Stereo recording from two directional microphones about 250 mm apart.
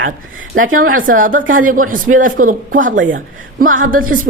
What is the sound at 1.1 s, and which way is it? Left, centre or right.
Speech, right.